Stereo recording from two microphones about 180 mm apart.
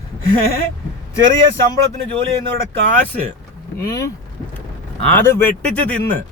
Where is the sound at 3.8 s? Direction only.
15° left (ahead or behind).